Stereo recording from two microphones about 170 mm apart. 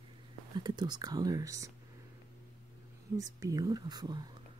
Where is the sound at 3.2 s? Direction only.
20° right (ahead or behind).